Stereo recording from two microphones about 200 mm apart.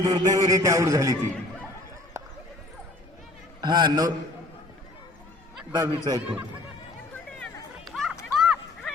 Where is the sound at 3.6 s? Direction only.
20° right (ahead or behind).